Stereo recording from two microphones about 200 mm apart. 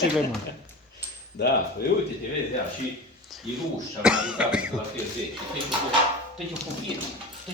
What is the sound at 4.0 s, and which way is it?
Speech, 5° right (ahead or behind).